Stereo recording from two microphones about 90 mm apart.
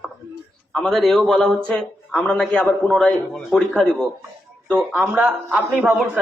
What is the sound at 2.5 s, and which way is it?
Speech, 15° left (ahead or behind).